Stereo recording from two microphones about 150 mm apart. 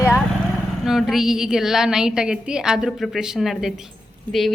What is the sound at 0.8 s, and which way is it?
A woman's voice, centre (ahead or behind).